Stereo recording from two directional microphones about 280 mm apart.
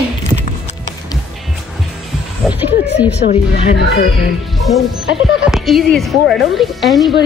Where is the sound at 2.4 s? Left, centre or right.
Centre.